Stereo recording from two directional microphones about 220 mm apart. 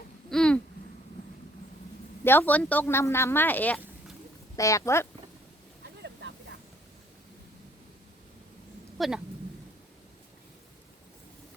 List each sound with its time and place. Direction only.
0.3 s a sound: 5° left (ahead or behind)
2.2 s speech: 10° left (ahead or behind)
5.8 s vehicle: 50° right (ahead or behind)
9.0 s speech: centre (ahead or behind)